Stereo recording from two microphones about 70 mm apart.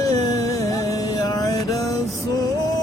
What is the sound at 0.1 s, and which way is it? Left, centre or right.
Music, left.